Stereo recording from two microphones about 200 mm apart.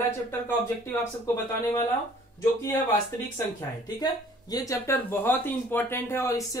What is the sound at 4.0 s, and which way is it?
Speech, 20° left (ahead or behind).